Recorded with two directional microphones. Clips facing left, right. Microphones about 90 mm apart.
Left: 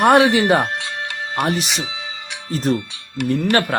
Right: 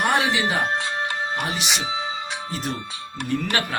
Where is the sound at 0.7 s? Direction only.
30° right (ahead or behind).